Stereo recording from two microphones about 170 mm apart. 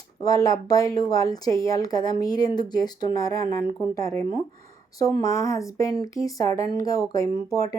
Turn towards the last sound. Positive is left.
turn(degrees=20)  # may be behind; listen again after turning